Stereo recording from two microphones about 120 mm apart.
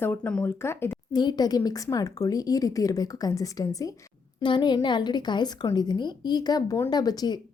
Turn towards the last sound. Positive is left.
turn(degrees=35)  # may be behind; listen again after turning